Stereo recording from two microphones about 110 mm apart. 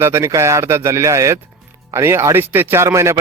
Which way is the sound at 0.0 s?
25° right (ahead or behind).